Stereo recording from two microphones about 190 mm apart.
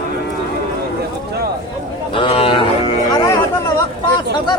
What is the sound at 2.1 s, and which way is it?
Music, 30° left (ahead or behind).